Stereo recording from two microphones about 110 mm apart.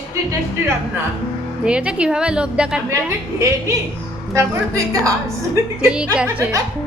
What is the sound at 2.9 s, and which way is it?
A woman's voice, 25° right (ahead or behind).